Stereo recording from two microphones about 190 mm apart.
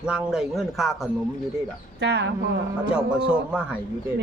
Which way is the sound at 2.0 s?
65° right (ahead or behind).